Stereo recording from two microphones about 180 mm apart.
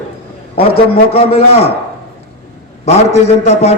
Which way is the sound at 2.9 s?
35° left (ahead or behind).